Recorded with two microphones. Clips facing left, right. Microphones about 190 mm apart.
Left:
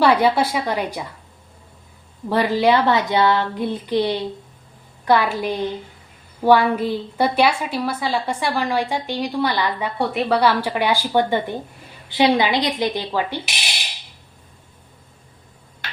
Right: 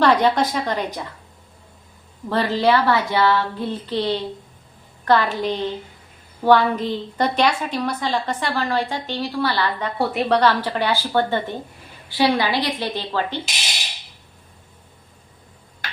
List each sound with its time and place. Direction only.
0.0 s a woman's voice: 10° left (ahead or behind)
2.3 s a woman's voice: 10° left (ahead or behind)
10.0 s a woman's voice: centre (ahead or behind)